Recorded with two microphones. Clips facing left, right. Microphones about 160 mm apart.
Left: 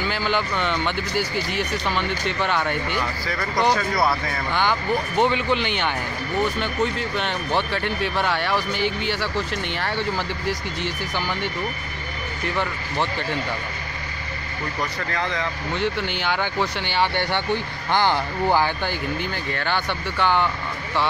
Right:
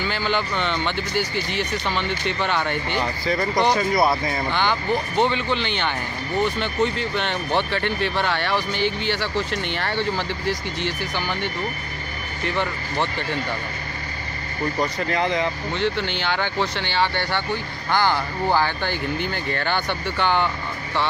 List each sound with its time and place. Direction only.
0.1 s speech: 5° left (ahead or behind)
3.0 s speech: 20° right (ahead or behind)
4.6 s speech: 5° left (ahead or behind)
14.8 s speech: 20° right (ahead or behind)
15.8 s speech: 10° left (ahead or behind)
19.3 s speech: centre (ahead or behind)